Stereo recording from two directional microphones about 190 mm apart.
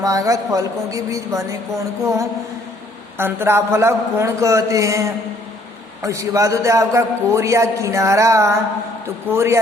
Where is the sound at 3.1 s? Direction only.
10° right (ahead or behind).